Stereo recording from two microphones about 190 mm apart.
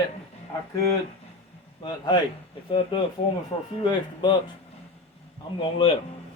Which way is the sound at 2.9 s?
25° left (ahead or behind).